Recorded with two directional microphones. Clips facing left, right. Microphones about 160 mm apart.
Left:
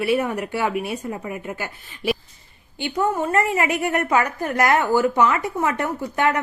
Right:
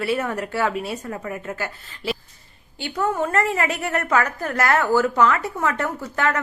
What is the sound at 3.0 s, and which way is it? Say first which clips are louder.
A woman's voice: left 1 dB; 10° left (ahead or behind).